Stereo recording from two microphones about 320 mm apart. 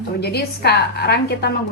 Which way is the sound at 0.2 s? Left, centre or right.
Left.